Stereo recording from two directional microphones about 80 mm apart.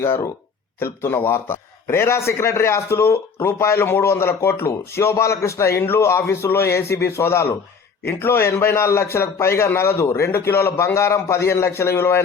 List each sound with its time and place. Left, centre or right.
0.0 s a man's voice: left